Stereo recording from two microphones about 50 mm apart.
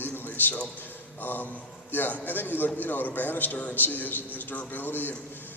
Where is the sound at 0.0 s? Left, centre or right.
Left.